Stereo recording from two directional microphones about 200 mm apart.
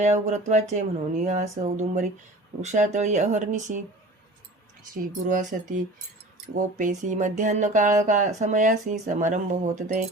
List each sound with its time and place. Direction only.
0.0 s speech: 35° right (ahead or behind)
5.2 s speech: 40° right (ahead or behind)